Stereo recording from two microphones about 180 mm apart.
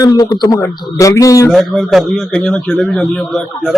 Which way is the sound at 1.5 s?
Centre (ahead or behind).